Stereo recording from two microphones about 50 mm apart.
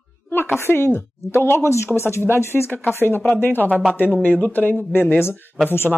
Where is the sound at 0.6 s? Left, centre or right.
Left.